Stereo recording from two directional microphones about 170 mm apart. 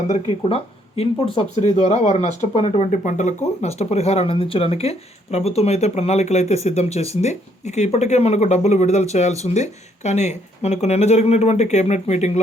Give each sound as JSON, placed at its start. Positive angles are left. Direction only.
{"t": 0.3, "sound": "speech", "side_deg": 35}